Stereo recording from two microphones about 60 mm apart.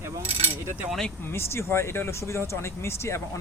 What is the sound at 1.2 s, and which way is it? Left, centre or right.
Speech, left.